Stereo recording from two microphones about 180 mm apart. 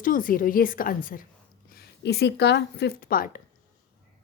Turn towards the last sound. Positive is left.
turn(degrees=50)  # may be behind; listen again after turning